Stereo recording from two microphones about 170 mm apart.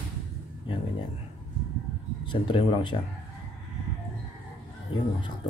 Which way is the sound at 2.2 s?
30° left (ahead or behind).